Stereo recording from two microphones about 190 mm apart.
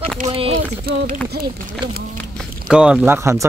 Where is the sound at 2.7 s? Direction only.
5° right (ahead or behind).